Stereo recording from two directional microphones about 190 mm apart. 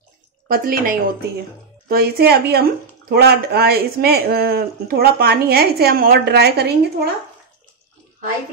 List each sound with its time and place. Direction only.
0.5 s speech: 50° right (ahead or behind)